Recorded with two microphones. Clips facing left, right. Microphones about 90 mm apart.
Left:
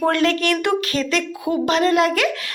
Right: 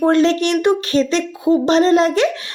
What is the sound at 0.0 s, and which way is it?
Speech, 25° right (ahead or behind).